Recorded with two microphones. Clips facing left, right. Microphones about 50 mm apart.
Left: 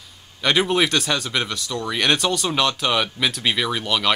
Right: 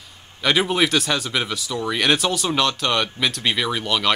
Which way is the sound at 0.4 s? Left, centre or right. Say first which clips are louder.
Even; centre.